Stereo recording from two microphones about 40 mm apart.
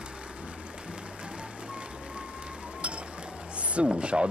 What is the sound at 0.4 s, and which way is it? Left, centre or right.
Music, right.